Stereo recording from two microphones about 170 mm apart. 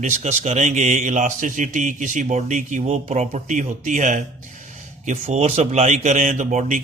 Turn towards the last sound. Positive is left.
turn(degrees=-45)  # may be behind; listen again after turning